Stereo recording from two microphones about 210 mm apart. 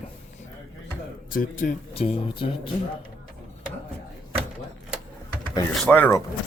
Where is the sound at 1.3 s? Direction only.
40° left (ahead or behind).